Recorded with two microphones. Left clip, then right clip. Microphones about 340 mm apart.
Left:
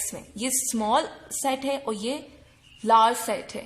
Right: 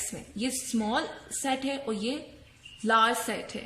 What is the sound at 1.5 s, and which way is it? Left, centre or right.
A woman's voice, centre.